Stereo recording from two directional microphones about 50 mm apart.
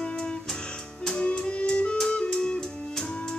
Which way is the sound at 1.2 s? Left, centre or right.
Left.